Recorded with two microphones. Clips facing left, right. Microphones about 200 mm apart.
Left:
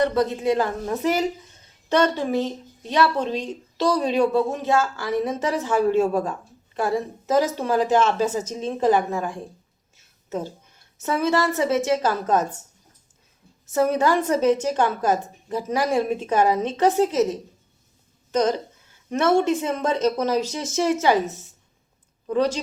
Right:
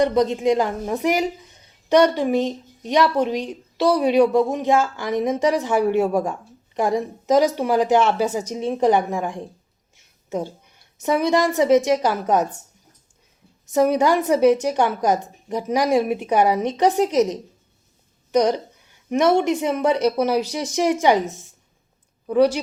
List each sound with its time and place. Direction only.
0.0 s a woman's voice: 15° right (ahead or behind)
13.7 s speech: 15° right (ahead or behind)